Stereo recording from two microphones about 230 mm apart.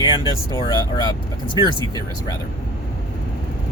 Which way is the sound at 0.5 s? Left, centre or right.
Centre.